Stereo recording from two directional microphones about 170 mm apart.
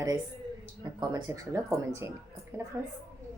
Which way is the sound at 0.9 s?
20° right (ahead or behind).